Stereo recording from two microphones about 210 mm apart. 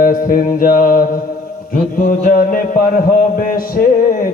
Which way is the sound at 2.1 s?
45° left (ahead or behind).